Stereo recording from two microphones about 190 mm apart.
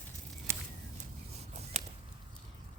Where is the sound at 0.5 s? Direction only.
15° right (ahead or behind).